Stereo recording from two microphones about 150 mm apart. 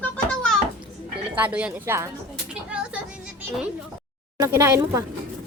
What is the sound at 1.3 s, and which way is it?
Speech, 10° right (ahead or behind).